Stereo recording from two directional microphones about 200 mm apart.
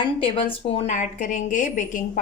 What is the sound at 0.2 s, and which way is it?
A woman's voice, 25° left (ahead or behind).